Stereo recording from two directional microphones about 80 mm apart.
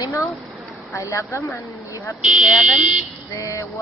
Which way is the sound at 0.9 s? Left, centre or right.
Left.